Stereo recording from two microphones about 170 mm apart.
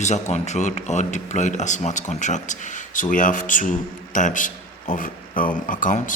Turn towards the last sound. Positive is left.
turn(degrees=50)  # may be behind; listen again after turning